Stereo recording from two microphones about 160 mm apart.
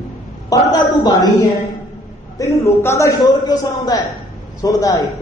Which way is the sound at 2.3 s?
20° left (ahead or behind).